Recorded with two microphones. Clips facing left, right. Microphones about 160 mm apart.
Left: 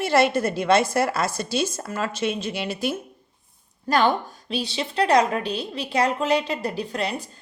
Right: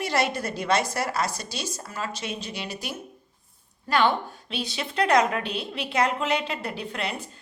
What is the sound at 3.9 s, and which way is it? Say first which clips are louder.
A woman's voice: left 2 dB; 40° left (ahead or behind).